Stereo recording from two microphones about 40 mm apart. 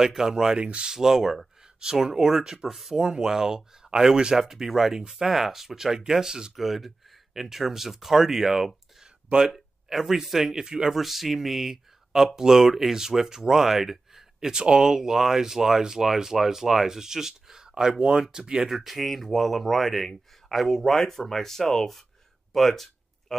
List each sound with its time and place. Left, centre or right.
0.0 s speech: centre
0.6 s speech: right
0.9 s speech: centre
1.8 s speech: centre
6.5 s speech: centre
9.3 s speech: right
9.8 s speech: centre
14.5 s speech: centre
18.7 s speech: centre
22.5 s a sound: centre